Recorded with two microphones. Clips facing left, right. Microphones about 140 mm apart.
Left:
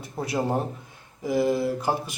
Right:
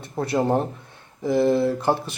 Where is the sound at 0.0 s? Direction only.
5° left (ahead or behind).